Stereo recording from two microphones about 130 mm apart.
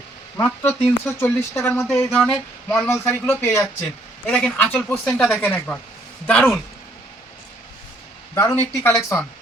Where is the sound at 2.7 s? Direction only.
20° left (ahead or behind).